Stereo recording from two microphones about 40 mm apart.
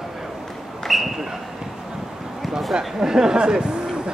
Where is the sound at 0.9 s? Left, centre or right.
Centre.